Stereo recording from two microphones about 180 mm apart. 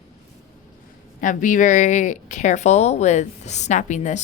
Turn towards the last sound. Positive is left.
turn(degrees=40)  # may be behind; listen again after turning